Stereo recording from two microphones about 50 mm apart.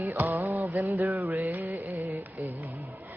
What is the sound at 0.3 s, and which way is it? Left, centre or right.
Music, right.